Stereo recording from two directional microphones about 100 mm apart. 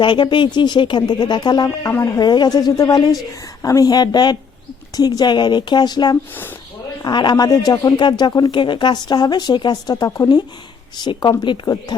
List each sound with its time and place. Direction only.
0.0 s speech: 50° left (ahead or behind)
1.9 s a woman's voice: 30° left (ahead or behind); by 11.6 s 55° left (ahead or behind)
11.6 s a woman's voice: 40° left (ahead or behind)